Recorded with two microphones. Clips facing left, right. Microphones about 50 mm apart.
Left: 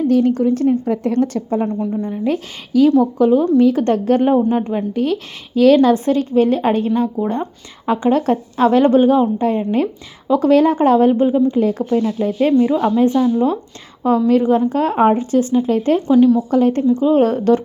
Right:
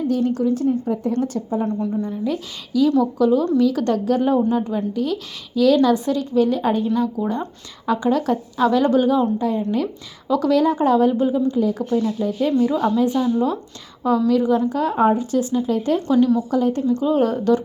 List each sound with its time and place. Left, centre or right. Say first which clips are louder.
0.1 s speech: left 5 dB; left
1.6 s a woman's voice: left 2 dB; left
2.2 s speech: left 4 dB; left
3.0 s a woman's voice: left 4 dB; left
10.2 s a woman's voice: left 4 dB; left
10.5 s speech: left 5 dB; left
11.5 s speech: left 4 dB; left
12.5 s speech: left 4 dB; left
13.0 s a woman's voice: left 5 dB; left
14.3 s a woman's voice: left 5 dB; left
16.0 s speech: left 6 dB; centre
16.5 s speech: left 5 dB; left